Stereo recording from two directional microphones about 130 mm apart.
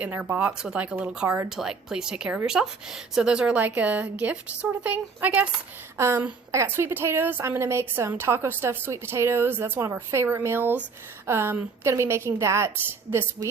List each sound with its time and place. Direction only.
0.0 s a woman's voice: 15° right (ahead or behind)